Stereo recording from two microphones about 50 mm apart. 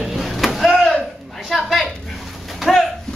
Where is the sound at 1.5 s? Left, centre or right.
Centre.